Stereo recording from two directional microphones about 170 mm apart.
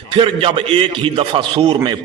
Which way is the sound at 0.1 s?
30° right (ahead or behind).